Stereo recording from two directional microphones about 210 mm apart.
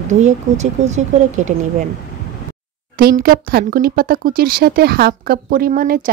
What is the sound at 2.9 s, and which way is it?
Speech, 45° right (ahead or behind).